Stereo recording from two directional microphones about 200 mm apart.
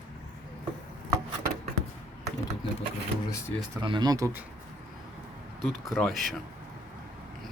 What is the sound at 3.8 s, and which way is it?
Speech, 20° right (ahead or behind).